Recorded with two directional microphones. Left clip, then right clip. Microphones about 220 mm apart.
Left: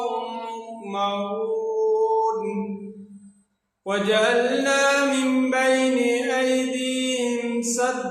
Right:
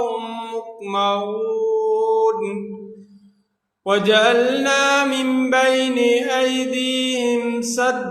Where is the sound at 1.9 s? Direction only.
35° right (ahead or behind).